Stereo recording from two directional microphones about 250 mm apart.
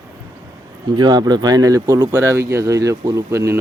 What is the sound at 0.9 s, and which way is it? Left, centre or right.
Speech, centre.